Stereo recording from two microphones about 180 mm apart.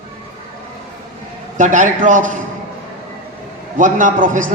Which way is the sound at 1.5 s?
45° right (ahead or behind).